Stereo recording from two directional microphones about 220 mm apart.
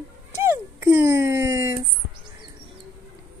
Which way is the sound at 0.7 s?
10° right (ahead or behind).